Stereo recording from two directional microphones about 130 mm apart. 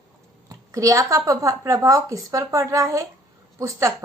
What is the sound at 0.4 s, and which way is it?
A woman's voice, 25° right (ahead or behind).